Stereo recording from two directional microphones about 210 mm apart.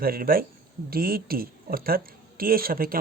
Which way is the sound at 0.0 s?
45° right (ahead or behind).